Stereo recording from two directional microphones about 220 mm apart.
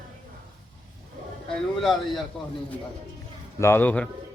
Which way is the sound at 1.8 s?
Centre (ahead or behind).